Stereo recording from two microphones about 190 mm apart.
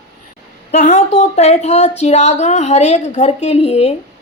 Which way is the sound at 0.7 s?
35° left (ahead or behind).